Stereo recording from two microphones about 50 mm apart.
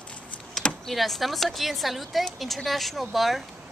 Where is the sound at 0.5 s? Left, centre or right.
Centre.